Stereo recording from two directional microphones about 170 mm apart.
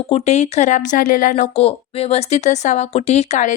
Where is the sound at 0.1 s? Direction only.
40° left (ahead or behind).